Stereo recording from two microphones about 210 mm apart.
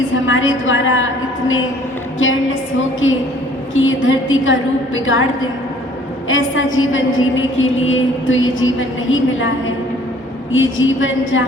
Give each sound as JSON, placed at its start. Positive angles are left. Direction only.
{"t": 0.1, "sound": "a woman's voice", "side_deg": 65}
{"t": 6.2, "sound": "a woman's voice", "side_deg": 70}